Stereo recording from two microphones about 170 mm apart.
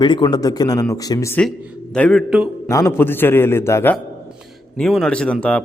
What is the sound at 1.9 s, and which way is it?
Speech, 5° left (ahead or behind).